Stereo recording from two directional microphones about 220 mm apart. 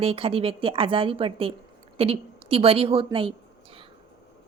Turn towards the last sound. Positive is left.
turn(degrees=-25)  # may be behind; listen again after turning